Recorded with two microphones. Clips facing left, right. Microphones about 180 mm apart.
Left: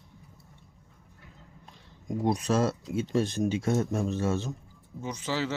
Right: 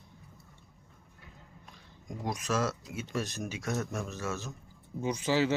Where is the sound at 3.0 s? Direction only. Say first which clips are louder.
Left 11 dB; 30° left (ahead or behind).